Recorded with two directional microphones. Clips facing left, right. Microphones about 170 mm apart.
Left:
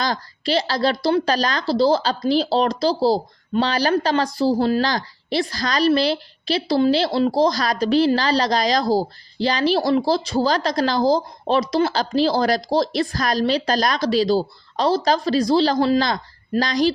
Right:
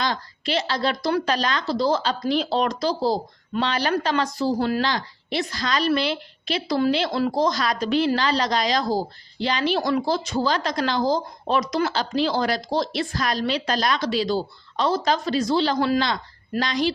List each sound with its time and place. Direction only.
0.0 s a woman's voice: 35° left (ahead or behind)